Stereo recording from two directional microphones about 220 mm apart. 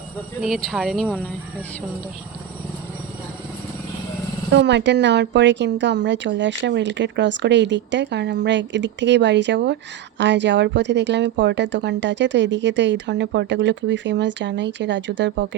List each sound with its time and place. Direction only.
0.4 s speech: centre (ahead or behind)
4.5 s a woman's voice: 50° right (ahead or behind)